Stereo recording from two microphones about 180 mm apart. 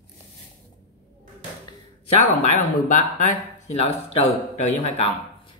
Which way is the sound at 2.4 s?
45° left (ahead or behind).